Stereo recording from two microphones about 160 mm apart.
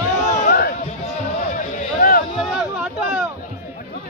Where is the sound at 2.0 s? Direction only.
65° left (ahead or behind).